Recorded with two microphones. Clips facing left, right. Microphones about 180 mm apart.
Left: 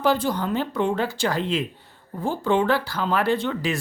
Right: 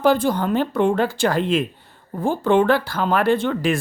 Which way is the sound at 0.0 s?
50° right (ahead or behind).